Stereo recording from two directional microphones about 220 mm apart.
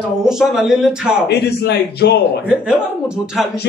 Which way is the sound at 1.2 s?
45° left (ahead or behind).